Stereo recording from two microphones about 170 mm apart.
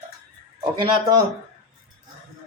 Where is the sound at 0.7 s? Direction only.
25° right (ahead or behind).